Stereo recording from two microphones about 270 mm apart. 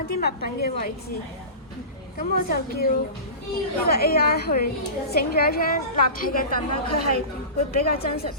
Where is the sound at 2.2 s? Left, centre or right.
Left.